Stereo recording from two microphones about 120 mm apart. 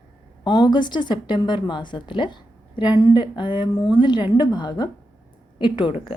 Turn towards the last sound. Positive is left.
turn(degrees=50)  # may be behind; listen again after turning